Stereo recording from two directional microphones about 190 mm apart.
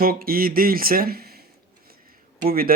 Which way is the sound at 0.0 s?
50° right (ahead or behind).